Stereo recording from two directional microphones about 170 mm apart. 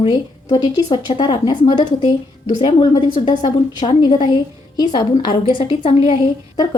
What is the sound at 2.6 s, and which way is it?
A woman's voice, 25° left (ahead or behind).